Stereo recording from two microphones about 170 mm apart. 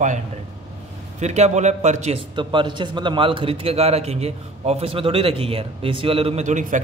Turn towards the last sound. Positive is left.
turn(degrees=-45)  # may be behind; listen again after turning